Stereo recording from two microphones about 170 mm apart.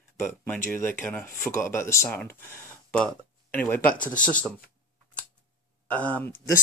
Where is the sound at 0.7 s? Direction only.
10° left (ahead or behind).